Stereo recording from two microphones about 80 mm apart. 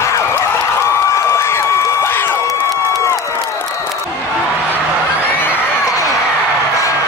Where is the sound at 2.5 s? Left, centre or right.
Left.